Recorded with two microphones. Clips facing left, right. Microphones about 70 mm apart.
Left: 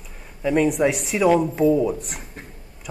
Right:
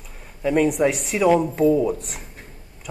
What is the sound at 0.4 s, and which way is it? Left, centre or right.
Speech, centre.